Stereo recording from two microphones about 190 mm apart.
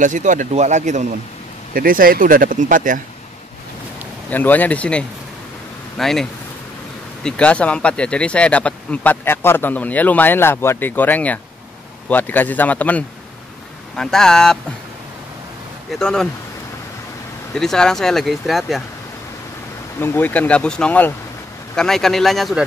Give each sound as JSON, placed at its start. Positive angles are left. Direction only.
{"t": 0.0, "sound": "speech", "side_deg": -40}
{"t": 4.3, "sound": "speech", "side_deg": 10}
{"t": 7.2, "sound": "speech", "side_deg": 5}
{"t": 15.9, "sound": "speech", "side_deg": 5}
{"t": 17.6, "sound": "speech", "side_deg": 0}
{"t": 20.0, "sound": "speech", "side_deg": 10}